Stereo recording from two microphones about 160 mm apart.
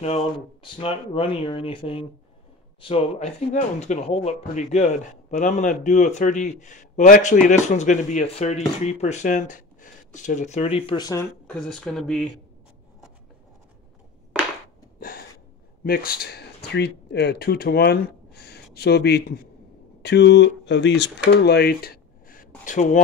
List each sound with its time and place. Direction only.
0.0 s speech: 40° left (ahead or behind)
11.0 s speech: 25° left (ahead or behind)
11.4 s speech: 5° left (ahead or behind)
15.0 s a sound: 65° left (ahead or behind)
15.8 s speech: 65° left (ahead or behind); by 21.1 s 90° left
21.3 s a sound: 90° left; by 22.5 s 65° left (ahead or behind)
22.7 s speech: 50° left (ahead or behind)